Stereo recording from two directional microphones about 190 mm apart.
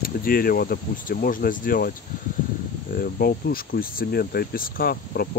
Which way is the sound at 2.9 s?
50° left (ahead or behind).